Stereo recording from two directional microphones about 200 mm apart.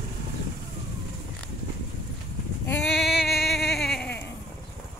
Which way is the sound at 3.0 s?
Centre (ahead or behind).